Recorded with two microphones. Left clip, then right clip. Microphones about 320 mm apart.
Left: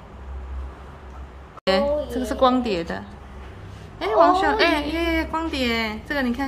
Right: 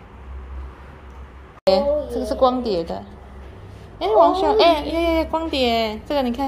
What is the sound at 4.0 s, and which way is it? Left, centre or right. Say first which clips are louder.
A woman's voice: right 2 dB; centre.